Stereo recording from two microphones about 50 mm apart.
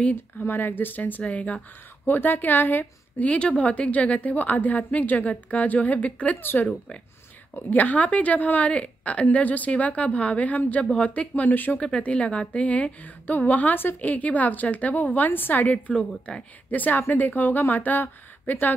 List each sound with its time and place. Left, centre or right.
0.1 s a woman's voice: left
1.2 s a woman's voice: left
2.0 s a woman's voice: left
3.3 s a woman's voice: left
7.7 s a woman's voice: left
11.8 s a woman's voice: left